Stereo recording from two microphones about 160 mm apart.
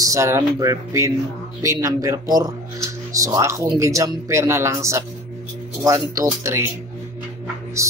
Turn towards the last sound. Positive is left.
turn(degrees=-20)  # may be behind; listen again after turning